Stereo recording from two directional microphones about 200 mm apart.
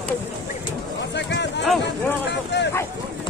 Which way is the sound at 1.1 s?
60° left (ahead or behind).